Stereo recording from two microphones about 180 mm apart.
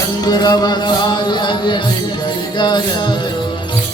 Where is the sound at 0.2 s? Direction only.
20° left (ahead or behind).